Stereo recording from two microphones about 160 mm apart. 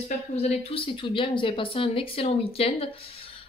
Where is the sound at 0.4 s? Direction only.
35° left (ahead or behind).